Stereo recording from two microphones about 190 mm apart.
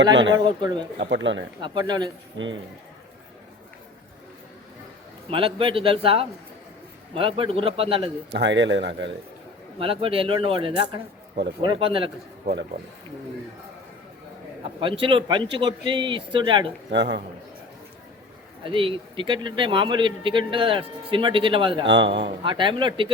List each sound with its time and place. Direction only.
0.0 s a man's voice: 70° right (ahead or behind)
0.3 s a man's voice: 20° right (ahead or behind)
0.9 s a man's voice: 70° right (ahead or behind)
1.6 s a man's voice: 25° right (ahead or behind)
5.3 s a man's voice: 30° right (ahead or behind)
8.3 s a man's voice: 70° right (ahead or behind)
9.7 s a man's voice: 30° right (ahead or behind)
15.0 s a man's voice: 25° right (ahead or behind)
16.9 s a man's voice: 70° right (ahead or behind)
18.6 s a man's voice: 25° right (ahead or behind)
21.8 s a man's voice: 70° right (ahead or behind)
22.4 s a man's voice: 25° right (ahead or behind)